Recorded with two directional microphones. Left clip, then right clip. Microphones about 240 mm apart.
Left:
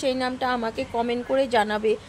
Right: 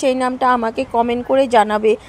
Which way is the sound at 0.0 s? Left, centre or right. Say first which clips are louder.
Right 9 dB; right.